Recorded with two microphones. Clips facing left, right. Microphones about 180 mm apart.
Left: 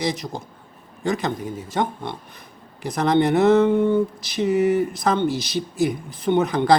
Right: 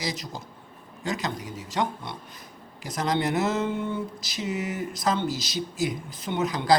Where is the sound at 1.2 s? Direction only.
50° left (ahead or behind).